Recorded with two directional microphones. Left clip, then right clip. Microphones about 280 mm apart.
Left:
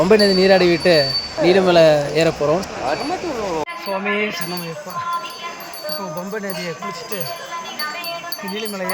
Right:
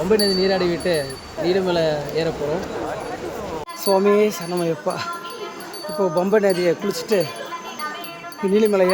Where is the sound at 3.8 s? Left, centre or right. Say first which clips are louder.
Right 7 dB; right.